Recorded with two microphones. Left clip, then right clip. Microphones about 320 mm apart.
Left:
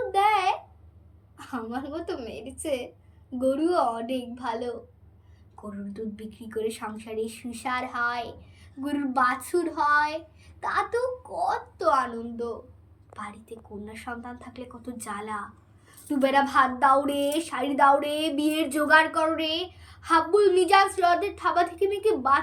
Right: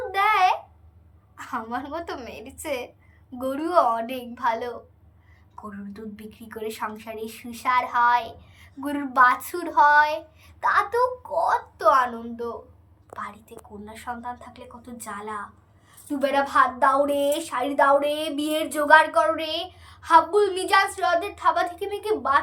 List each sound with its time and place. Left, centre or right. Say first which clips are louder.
0.1 s babbling: right 3 dB; centre
1.4 s a woman's voice: right 4 dB; centre
5.9 s a woman's voice: left 3 dB; centre